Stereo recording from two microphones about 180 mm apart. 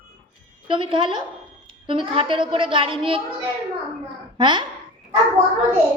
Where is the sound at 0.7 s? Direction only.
30° right (ahead or behind).